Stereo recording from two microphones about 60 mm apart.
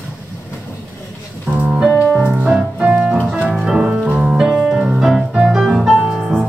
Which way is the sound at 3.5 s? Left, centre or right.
Centre.